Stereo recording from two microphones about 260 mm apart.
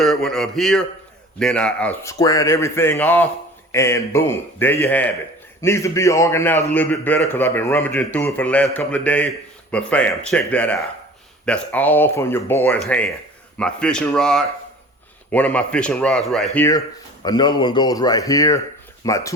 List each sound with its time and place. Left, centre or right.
0.0 s a man's voice: centre